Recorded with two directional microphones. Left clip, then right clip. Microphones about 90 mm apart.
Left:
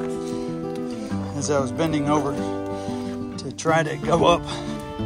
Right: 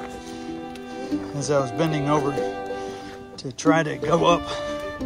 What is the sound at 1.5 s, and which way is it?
Speech, 35° left (ahead or behind).